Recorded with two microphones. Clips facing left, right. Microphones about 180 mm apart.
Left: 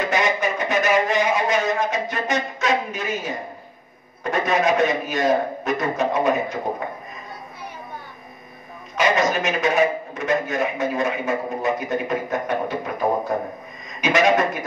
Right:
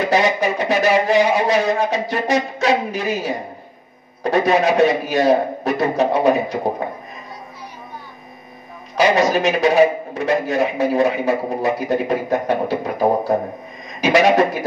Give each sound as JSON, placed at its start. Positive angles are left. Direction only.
{"t": 0.0, "sound": "a man's voice", "side_deg": -35}
{"t": 8.9, "sound": "a man's voice", "side_deg": -35}